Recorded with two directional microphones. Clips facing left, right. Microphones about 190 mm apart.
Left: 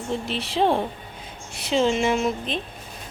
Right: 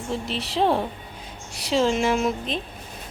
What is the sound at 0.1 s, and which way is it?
Speech, centre (ahead or behind).